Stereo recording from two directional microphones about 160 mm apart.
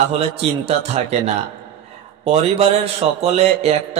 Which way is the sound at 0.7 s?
40° right (ahead or behind).